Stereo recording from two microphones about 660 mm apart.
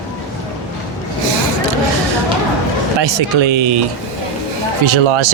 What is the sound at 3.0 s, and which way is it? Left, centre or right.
Speech, right.